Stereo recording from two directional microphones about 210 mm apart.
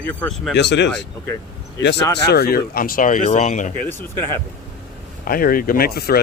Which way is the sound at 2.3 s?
45° left (ahead or behind).